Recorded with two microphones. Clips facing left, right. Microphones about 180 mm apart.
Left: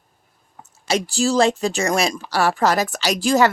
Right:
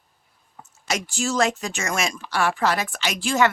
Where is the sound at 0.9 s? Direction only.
35° left (ahead or behind).